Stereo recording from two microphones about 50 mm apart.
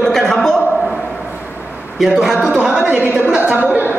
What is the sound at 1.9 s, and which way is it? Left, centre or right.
Speech, centre.